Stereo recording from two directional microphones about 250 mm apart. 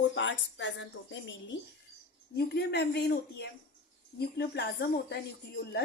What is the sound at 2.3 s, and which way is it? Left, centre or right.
Speech, left.